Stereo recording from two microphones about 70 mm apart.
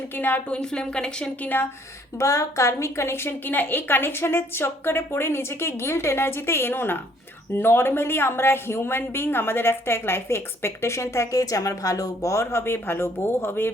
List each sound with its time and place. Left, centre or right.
0.2 s speech: left
0.6 s a woman's voice: centre
2.1 s a woman's voice: left